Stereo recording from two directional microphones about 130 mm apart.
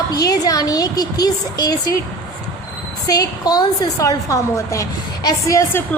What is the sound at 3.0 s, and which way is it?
A woman's voice, 30° left (ahead or behind).